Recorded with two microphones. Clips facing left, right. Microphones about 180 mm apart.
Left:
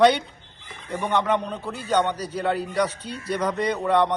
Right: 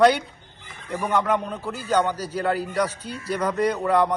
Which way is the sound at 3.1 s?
30° left (ahead or behind).